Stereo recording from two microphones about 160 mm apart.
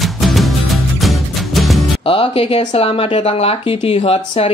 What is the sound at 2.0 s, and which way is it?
Speech, 35° left (ahead or behind).